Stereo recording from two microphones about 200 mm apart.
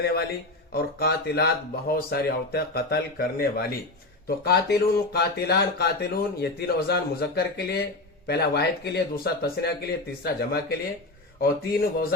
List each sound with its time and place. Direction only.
0.0 s speech: 50° left (ahead or behind)